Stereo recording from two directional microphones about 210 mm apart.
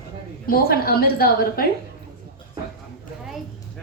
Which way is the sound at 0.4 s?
45° left (ahead or behind).